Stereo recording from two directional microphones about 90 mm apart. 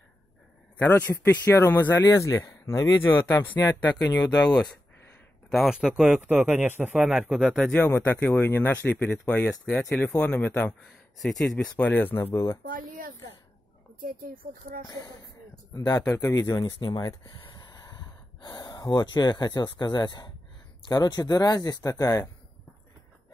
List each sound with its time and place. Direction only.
0.8 s speech: 20° left (ahead or behind)
3.1 s speech: 20° left (ahead or behind)
5.7 s speech: 5° right (ahead or behind)
7.7 s speech: 20° left (ahead or behind)
9.2 s speech: 5° left (ahead or behind)
11.1 s speech: 5° left (ahead or behind)
11.5 s speech: 15° left (ahead or behind)
14.9 s speech: 45° left (ahead or behind)
16.5 s a sound: 50° left (ahead or behind)
18.6 s speech: 50° left (ahead or behind)